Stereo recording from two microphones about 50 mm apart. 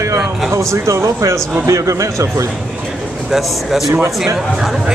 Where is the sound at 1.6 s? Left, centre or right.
Right.